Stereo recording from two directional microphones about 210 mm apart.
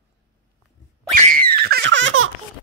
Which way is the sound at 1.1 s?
40° right (ahead or behind).